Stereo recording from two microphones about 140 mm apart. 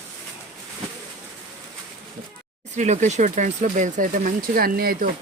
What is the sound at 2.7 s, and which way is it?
Speech, 55° right (ahead or behind).